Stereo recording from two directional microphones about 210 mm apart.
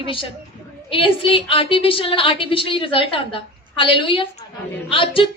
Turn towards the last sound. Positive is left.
turn(degrees=25)  # may be behind; listen again after turning